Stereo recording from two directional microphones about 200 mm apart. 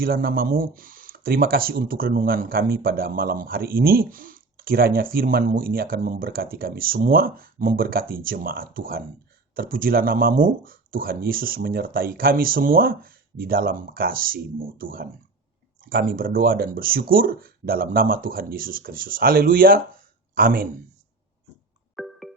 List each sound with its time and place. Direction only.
0.0 s speech: 50° right (ahead or behind)
21.9 s music: centre (ahead or behind)